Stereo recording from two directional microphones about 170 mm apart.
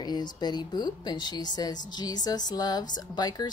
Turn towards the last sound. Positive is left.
turn(degrees=25)  # may be behind; listen again after turning